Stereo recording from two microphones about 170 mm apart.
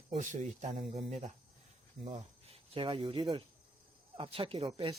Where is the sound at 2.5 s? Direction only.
30° right (ahead or behind).